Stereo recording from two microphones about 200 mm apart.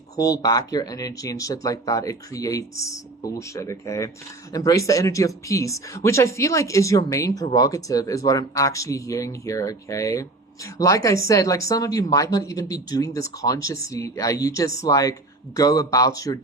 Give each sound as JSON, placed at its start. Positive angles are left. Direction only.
{"t": 0.2, "sound": "speech", "side_deg": 15}